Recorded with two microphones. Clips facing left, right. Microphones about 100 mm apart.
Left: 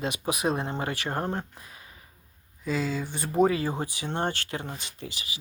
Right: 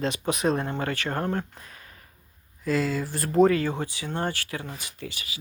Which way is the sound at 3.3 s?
10° left (ahead or behind).